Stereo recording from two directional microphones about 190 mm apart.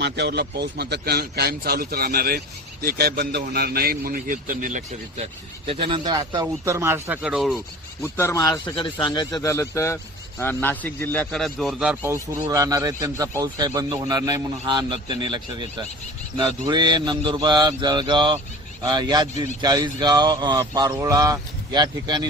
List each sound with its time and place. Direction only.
0.0 s a man's voice: 60° right (ahead or behind); by 7.6 s centre (ahead or behind)
8.0 s a man's voice: 15° left (ahead or behind); by 22.2 s 20° right (ahead or behind)